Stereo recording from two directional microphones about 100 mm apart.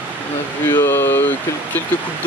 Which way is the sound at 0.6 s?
25° left (ahead or behind).